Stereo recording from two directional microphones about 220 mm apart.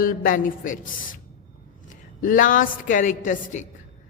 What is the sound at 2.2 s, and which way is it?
A woman's voice, 35° left (ahead or behind).